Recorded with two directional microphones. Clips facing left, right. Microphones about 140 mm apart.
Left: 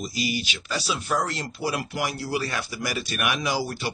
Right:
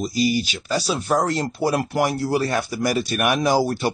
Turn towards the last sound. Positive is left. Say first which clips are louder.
# right 8 dB
turn(degrees=-45)  # may be behind; listen again after turning